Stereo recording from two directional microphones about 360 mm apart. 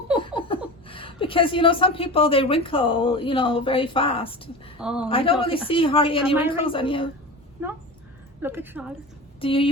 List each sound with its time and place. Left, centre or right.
0.2 s speech: centre
4.8 s a woman's voice: centre
5.0 s a woman's voice: centre
8.4 s a woman's voice: centre
9.4 s a woman's voice: centre